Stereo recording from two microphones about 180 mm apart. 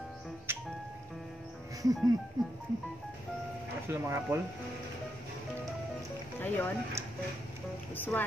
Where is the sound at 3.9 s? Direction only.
10° right (ahead or behind).